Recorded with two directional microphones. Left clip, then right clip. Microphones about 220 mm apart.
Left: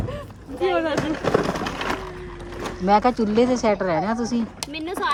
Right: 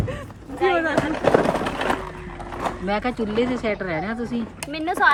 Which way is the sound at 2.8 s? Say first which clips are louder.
Left 9 dB; 25° left (ahead or behind).